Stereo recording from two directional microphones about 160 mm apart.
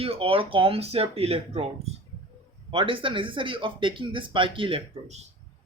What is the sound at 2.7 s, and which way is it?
Speech, 35° right (ahead or behind).